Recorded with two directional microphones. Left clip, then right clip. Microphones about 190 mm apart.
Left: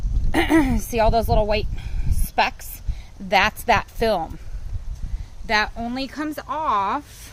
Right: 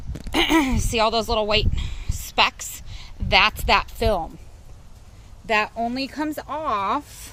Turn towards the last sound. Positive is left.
turn(degrees=-20)  # may be behind; listen again after turning